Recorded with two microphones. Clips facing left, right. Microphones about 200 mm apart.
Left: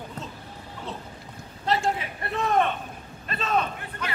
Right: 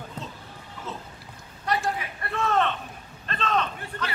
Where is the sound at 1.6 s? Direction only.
25° left (ahead or behind).